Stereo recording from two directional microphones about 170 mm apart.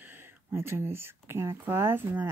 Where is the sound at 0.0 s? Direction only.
10° right (ahead or behind).